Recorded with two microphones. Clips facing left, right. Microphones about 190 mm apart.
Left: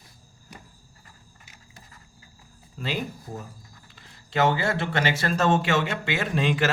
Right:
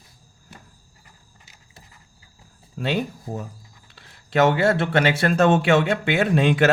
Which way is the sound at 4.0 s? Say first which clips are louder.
Right 5 dB; 70° right (ahead or behind).